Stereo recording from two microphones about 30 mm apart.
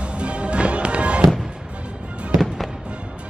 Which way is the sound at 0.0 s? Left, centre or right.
Right.